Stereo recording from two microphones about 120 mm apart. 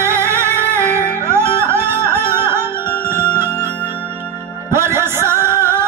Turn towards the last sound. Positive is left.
turn(degrees=-20)  # may be behind; listen again after turning